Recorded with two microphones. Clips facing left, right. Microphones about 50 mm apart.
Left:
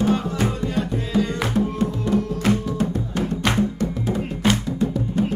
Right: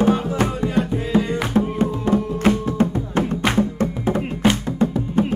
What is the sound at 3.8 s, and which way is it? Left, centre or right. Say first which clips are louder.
Music: right 3 dB; right.